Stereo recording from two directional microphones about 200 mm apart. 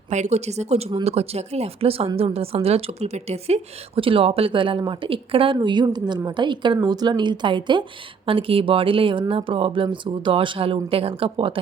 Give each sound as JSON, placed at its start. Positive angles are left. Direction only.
{"t": 0.1, "sound": "speech", "side_deg": -35}